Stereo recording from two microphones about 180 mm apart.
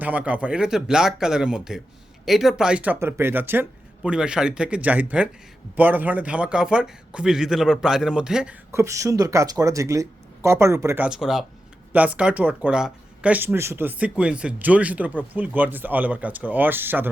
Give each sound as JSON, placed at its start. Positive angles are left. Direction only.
{"t": 0.0, "sound": "a man's voice", "side_deg": -10}
{"t": 8.7, "sound": "speech", "side_deg": -15}